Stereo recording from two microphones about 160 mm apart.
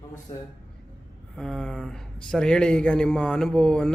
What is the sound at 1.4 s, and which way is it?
Speech, 5° left (ahead or behind).